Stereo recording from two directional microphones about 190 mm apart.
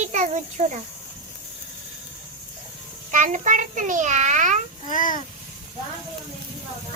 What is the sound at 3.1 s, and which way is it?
A child's voice, 45° right (ahead or behind).